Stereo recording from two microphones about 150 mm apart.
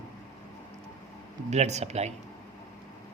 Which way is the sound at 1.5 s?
50° right (ahead or behind).